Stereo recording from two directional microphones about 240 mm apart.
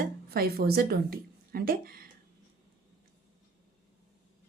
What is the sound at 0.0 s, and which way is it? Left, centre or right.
A woman's voice, right.